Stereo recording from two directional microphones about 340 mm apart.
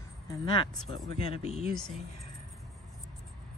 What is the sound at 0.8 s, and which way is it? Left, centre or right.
Speech, right.